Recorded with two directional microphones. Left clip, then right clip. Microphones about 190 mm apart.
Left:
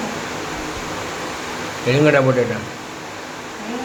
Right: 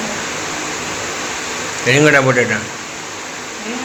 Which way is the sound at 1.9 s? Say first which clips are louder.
Right 4 dB; centre (ahead or behind).